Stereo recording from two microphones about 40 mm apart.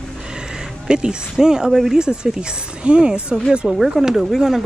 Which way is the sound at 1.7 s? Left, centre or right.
Centre.